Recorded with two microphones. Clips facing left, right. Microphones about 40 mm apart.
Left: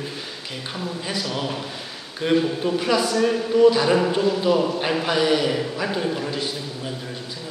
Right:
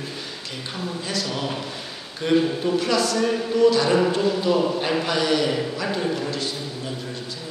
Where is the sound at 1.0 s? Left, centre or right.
Centre.